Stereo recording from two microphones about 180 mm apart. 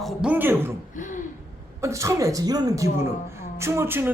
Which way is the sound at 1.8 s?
15° right (ahead or behind).